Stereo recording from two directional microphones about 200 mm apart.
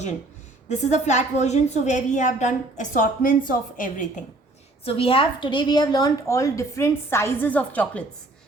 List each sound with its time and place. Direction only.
0.7 s a woman's voice: 35° left (ahead or behind)
4.9 s a woman's voice: 25° left (ahead or behind); by 8.0 s 5° left (ahead or behind)